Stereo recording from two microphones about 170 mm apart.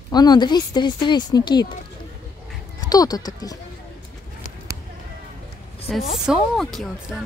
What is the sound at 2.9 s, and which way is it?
Speech, 20° left (ahead or behind).